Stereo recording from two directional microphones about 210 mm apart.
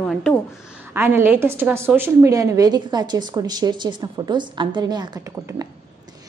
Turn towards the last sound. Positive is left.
turn(degrees=-20)  # may be behind; listen again after turning